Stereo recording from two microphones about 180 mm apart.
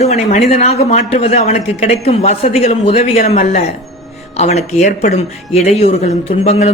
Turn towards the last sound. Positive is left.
turn(degrees=35)  # may be behind; listen again after turning